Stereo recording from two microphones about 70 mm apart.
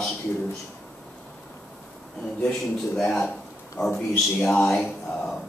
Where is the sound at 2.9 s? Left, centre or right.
Centre.